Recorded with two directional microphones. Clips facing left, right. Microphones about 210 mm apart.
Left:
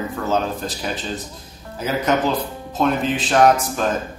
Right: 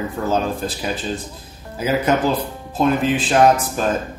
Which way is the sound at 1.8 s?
10° right (ahead or behind).